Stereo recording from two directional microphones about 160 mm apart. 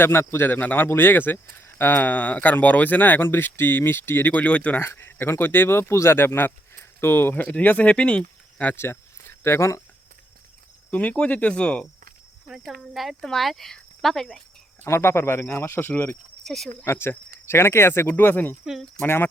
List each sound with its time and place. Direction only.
0.0 s speech: 15° left (ahead or behind)
10.9 s speech: 10° left (ahead or behind)
14.8 s speech: 15° left (ahead or behind)
16.8 s speech: 15° left (ahead or behind)
18.6 s speech: centre (ahead or behind)
19.0 s speech: 15° left (ahead or behind)